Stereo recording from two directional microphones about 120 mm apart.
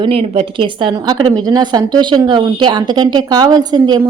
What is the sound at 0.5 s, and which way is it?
A woman's voice, 45° right (ahead or behind).